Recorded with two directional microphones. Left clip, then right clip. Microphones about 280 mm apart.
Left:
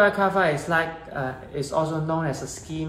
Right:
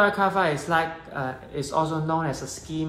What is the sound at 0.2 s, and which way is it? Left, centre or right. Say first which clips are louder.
A woman's voice: left 1 dB; centre.